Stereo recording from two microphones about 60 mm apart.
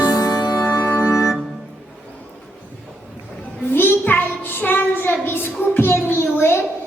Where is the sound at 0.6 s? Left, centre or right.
Left.